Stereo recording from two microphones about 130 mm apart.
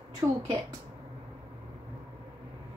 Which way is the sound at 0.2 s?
20° right (ahead or behind).